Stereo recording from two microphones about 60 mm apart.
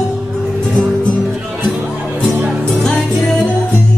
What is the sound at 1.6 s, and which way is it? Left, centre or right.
Music, centre.